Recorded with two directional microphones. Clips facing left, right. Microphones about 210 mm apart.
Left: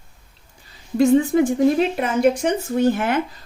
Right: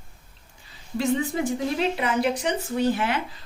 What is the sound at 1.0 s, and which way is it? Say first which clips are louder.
A woman's voice: left 9 dB; 50° left (ahead or behind).